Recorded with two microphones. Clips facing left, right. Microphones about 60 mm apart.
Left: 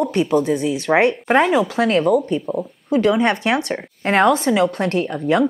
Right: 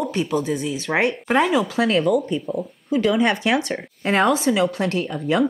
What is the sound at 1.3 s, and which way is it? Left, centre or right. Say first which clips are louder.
Speech: left 3 dB; left.